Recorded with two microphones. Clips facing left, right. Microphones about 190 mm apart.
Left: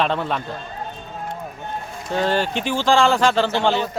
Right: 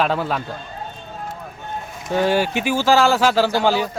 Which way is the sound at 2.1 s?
10° right (ahead or behind).